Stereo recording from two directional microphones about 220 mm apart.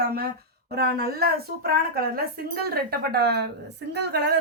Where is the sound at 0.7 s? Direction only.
45° right (ahead or behind).